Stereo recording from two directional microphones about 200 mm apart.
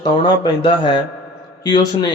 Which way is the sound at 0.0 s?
25° left (ahead or behind).